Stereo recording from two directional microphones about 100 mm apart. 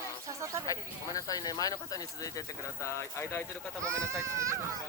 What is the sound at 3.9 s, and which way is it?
Speech, 30° right (ahead or behind).